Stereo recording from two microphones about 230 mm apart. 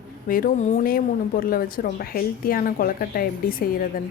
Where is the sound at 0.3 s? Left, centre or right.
Left.